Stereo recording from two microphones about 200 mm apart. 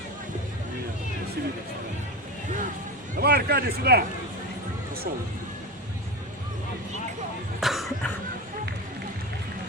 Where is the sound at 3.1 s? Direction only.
50° right (ahead or behind).